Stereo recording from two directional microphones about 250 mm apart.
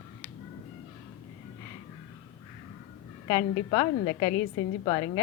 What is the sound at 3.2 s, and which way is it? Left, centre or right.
A woman's voice, centre.